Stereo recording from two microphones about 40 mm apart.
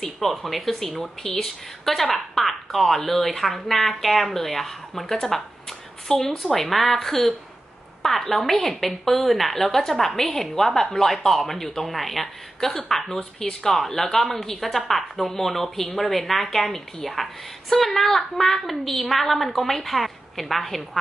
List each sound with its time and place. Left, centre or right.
0.0 s a woman's voice: centre
13.2 s speech: left
13.7 s a woman's voice: centre